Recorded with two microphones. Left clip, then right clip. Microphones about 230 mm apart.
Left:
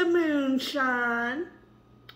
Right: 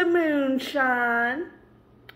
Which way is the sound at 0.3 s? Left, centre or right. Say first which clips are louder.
Right 3 dB; centre.